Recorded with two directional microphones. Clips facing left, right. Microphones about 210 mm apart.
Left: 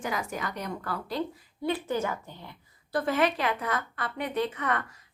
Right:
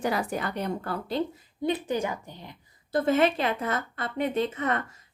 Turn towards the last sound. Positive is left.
turn(degrees=-25)  # may be behind; listen again after turning